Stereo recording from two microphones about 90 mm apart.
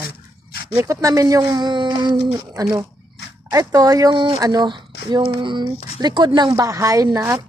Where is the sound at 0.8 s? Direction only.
40° right (ahead or behind).